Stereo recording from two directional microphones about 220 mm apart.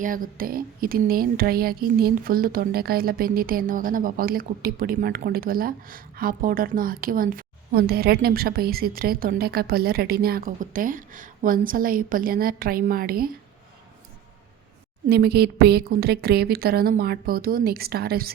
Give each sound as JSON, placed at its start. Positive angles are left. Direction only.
{"t": 0.0, "sound": "speech", "side_deg": -40}
{"t": 15.1, "sound": "a woman's voice", "side_deg": -45}